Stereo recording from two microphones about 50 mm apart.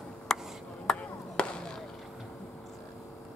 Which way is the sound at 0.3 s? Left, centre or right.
Centre.